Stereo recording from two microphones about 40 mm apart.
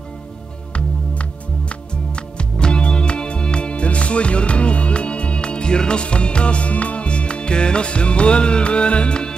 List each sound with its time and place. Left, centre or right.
1.7 s music: left